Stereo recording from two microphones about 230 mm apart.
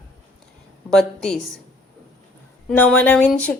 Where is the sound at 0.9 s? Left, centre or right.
Centre.